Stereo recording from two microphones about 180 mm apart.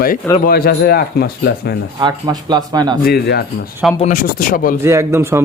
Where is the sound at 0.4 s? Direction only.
55° left (ahead or behind).